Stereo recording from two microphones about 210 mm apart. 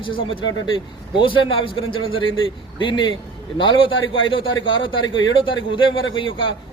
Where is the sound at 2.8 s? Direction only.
20° left (ahead or behind).